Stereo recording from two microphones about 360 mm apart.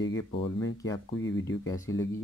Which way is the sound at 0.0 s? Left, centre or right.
Left.